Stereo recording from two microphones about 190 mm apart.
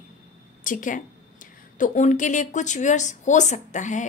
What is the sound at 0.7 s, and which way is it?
A woman's voice, 45° left (ahead or behind).